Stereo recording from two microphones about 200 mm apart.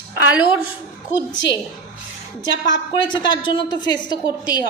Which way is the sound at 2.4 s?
65° left (ahead or behind).